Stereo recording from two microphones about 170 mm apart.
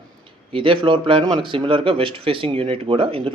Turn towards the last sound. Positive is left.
turn(degrees=-30)  # may be behind; listen again after turning